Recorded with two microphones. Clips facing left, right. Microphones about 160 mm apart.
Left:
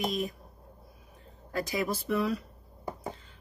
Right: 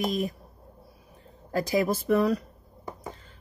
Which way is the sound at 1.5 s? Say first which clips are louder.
Right 6 dB; 40° right (ahead or behind).